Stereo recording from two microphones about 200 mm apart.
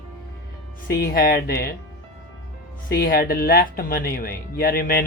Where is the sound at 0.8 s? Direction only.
45° left (ahead or behind).